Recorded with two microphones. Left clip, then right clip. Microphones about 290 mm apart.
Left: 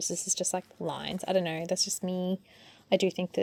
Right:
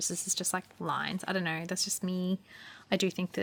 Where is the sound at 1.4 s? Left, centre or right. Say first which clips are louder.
Left 3 dB; right.